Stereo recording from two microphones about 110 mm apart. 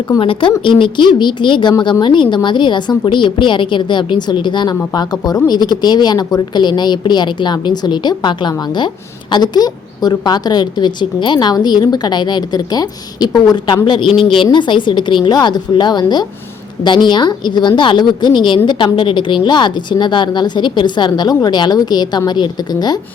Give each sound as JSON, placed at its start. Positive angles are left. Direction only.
{"t": 0.2, "sound": "a woman's voice", "side_deg": 50}